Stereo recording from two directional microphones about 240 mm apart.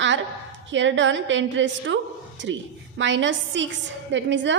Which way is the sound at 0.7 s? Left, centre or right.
Right.